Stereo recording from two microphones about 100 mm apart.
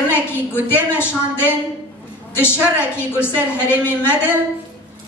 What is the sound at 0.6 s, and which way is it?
A woman's voice, 20° left (ahead or behind).